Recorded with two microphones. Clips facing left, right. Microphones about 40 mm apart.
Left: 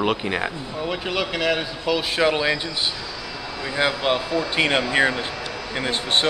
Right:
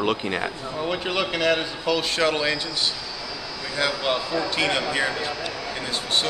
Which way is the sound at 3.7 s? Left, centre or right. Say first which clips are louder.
Left 3 dB; left.